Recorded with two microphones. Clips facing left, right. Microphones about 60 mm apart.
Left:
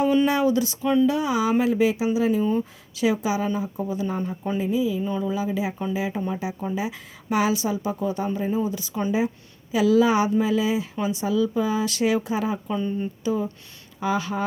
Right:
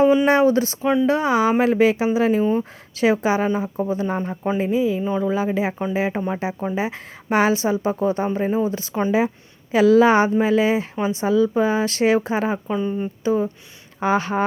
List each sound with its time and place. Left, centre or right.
0.3 s speech: right
2.4 s speech: right
5.0 s speech: right
5.3 s speech: right
12.7 s speech: centre
13.2 s speech: right